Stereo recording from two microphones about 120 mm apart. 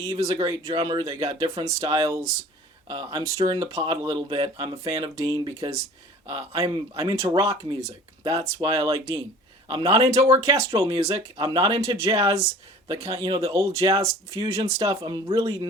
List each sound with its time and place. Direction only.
0.2 s speech: 30° right (ahead or behind)
10.3 s speech: 25° right (ahead or behind)